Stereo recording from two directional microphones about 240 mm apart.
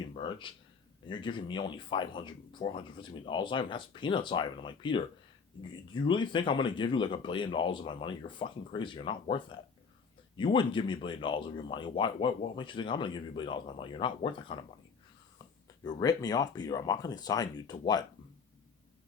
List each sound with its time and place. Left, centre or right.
0.1 s a sound: left
1.0 s speech: centre
15.8 s speech: centre